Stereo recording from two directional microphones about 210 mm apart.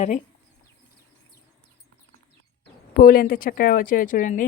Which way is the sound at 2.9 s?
45° left (ahead or behind).